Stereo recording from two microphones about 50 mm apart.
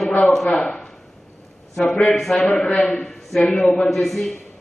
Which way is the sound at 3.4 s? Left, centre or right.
Centre.